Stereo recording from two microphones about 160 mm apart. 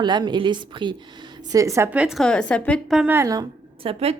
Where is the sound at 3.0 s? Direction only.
15° right (ahead or behind).